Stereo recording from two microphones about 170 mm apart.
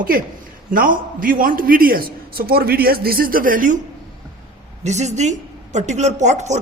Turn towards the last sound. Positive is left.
turn(degrees=-45)  # may be behind; listen again after turning